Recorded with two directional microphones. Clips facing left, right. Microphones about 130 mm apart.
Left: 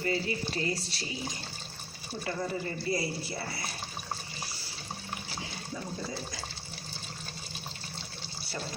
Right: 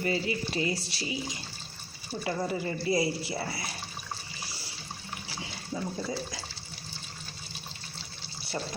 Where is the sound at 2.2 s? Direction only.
20° right (ahead or behind).